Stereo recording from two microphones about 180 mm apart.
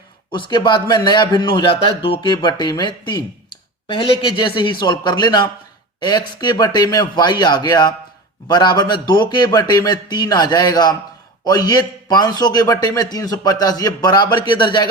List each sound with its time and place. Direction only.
0.3 s a man's voice: 25° left (ahead or behind)